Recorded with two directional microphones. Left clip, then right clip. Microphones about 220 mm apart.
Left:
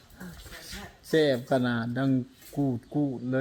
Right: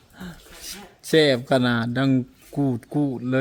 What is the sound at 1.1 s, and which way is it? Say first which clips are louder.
Speech: right 6 dB; 35° right (ahead or behind).